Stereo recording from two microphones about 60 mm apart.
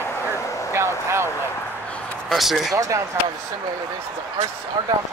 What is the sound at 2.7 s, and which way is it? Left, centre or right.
Speech, right.